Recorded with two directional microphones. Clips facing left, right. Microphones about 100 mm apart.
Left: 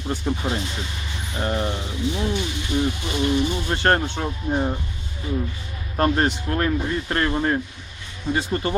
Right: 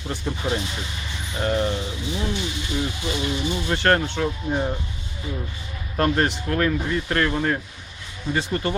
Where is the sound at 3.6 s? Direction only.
20° left (ahead or behind).